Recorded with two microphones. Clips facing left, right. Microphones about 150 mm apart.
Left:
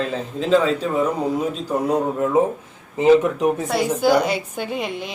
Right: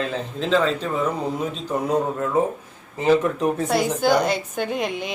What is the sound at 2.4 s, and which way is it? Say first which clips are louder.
Speech: left 3 dB; 15° left (ahead or behind).